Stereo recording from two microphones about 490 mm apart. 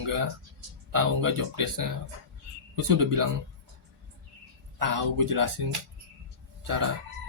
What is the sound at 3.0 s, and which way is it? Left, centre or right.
Speech, right.